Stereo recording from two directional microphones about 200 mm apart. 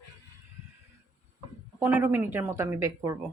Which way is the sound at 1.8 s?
10° right (ahead or behind).